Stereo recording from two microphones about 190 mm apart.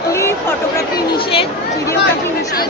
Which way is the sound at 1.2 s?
25° left (ahead or behind).